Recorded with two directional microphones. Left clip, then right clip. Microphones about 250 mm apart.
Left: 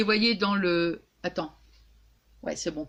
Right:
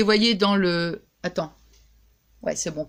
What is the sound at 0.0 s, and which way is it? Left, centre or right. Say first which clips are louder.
Speech: right 5 dB; right.